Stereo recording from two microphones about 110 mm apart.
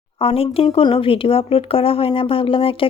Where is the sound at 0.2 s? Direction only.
60° left (ahead or behind).